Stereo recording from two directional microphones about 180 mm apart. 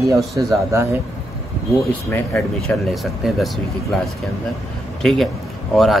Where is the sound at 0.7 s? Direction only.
15° right (ahead or behind).